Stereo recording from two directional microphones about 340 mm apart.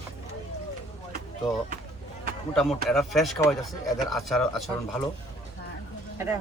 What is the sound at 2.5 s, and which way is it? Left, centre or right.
Speech, centre.